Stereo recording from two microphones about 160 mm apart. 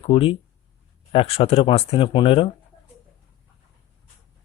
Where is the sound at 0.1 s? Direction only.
35° left (ahead or behind).